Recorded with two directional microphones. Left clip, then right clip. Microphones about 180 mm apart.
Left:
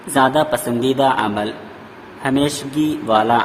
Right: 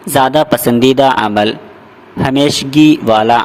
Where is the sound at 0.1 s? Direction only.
50° right (ahead or behind).